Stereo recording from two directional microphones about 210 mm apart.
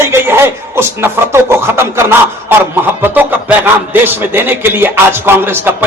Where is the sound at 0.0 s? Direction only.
10° right (ahead or behind).